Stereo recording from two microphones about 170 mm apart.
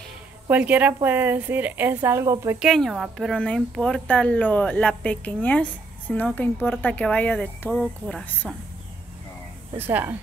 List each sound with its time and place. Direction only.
0.5 s a woman's voice: 10° right (ahead or behind)
2.6 s speech: centre (ahead or behind)
9.8 s a woman's voice: 10° right (ahead or behind)